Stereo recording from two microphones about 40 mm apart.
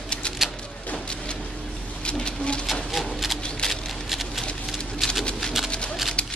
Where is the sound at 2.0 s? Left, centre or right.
Left.